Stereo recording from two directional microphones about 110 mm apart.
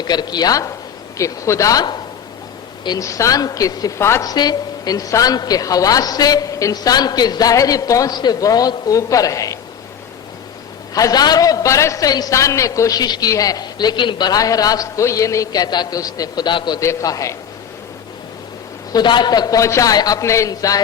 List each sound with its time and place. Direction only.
0.0 s a man's voice: 40° left (ahead or behind)
4.3 s a man's voice: 35° left (ahead or behind)
10.9 s a man's voice: 35° left (ahead or behind)
16.8 s a man's voice: 30° left (ahead or behind)
18.9 s a man's voice: 45° left (ahead or behind)